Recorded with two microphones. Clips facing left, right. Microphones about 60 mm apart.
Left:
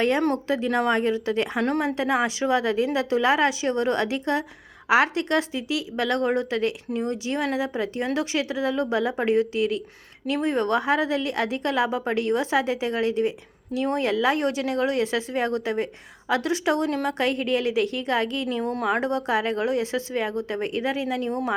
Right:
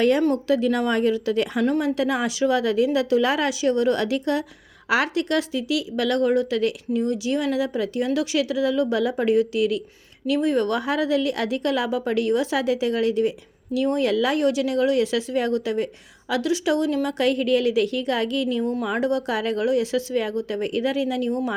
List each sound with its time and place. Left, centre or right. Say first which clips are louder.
0.4 s a woman's voice: right 2 dB; left